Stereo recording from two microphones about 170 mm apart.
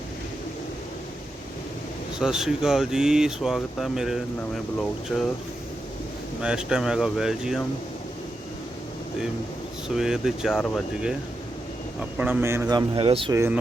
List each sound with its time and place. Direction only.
2.1 s speech: 5° right (ahead or behind)
6.4 s speech: 5° right (ahead or behind)
9.9 s speech: 5° right (ahead or behind)
12.1 s speech: 10° right (ahead or behind); by 13.3 s 30° right (ahead or behind)
13.3 s speech: 15° right (ahead or behind)